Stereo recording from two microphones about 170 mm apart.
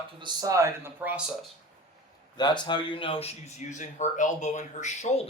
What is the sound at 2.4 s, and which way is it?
Speech, 25° left (ahead or behind).